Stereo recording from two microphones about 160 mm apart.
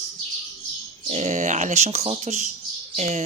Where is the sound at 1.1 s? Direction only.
45° right (ahead or behind).